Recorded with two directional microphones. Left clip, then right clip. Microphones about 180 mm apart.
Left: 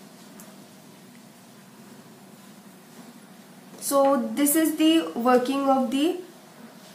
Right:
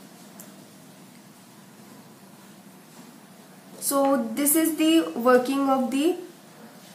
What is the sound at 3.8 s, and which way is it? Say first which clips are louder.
A woman's voice: left 2 dB; centre (ahead or behind).